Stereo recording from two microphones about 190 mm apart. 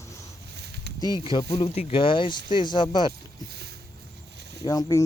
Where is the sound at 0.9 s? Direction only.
20° left (ahead or behind).